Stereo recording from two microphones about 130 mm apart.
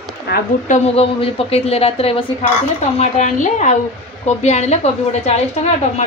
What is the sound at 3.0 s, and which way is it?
A woman's voice, 65° left (ahead or behind).